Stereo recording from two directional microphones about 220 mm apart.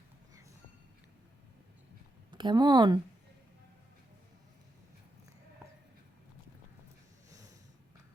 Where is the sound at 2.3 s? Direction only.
20° right (ahead or behind).